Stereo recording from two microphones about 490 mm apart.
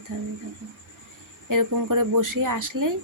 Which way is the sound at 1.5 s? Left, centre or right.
Right.